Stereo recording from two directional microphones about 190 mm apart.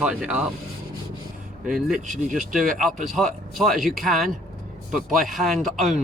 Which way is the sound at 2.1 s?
40° right (ahead or behind).